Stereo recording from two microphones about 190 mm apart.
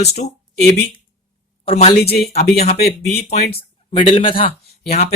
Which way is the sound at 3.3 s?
60° left (ahead or behind).